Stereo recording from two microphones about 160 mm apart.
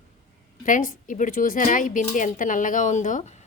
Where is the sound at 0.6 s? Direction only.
55° left (ahead or behind).